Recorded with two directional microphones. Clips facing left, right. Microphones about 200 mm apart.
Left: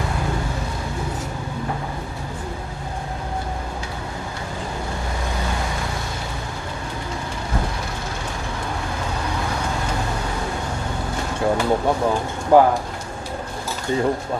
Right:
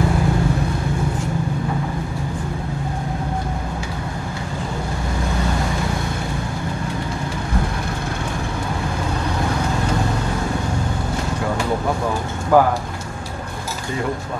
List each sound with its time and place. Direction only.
12.5 s speech: 25° left (ahead or behind)